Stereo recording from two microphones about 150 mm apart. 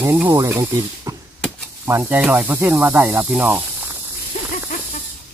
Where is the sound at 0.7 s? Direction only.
25° right (ahead or behind).